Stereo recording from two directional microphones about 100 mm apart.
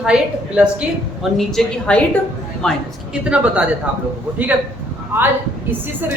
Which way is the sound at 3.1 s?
10° right (ahead or behind).